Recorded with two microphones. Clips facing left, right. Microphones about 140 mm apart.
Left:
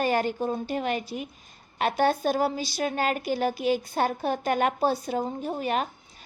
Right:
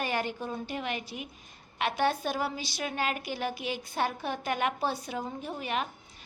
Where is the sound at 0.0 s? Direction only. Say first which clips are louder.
Left 7 dB; 40° left (ahead or behind).